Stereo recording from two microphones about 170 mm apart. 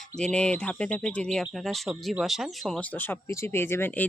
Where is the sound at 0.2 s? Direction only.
5° left (ahead or behind).